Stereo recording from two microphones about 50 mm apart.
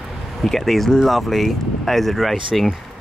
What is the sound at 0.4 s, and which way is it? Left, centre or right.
Speech, centre.